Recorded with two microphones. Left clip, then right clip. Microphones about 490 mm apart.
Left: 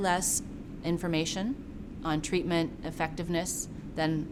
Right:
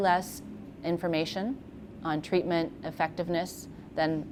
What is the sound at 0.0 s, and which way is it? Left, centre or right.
A woman's voice, centre.